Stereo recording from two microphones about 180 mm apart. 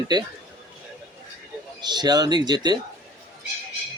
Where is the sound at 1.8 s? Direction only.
25° right (ahead or behind).